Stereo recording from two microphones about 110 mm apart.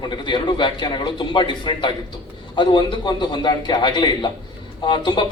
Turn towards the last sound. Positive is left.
turn(degrees=45)  # may be behind; listen again after turning